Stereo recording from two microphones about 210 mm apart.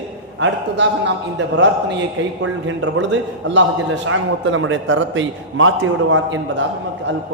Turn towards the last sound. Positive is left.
turn(degrees=-65)  # may be behind; listen again after turning